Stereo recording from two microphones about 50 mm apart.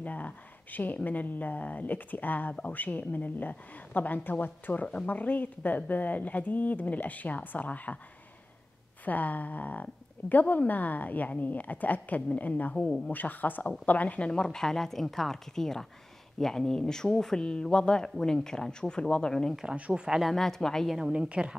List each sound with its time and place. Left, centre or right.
0.0 s speech: left
4.8 s speech: left
9.0 s speech: left
12.7 s speech: centre
13.1 s speech: left; by 19.5 s centre
19.9 s speech: centre
20.2 s speech: centre
21.1 s a woman's voice: right